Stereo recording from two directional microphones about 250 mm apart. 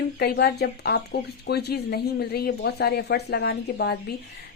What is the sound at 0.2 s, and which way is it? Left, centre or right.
Speech, left.